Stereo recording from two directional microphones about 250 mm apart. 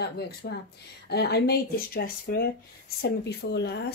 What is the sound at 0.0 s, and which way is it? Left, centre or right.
Speech, left.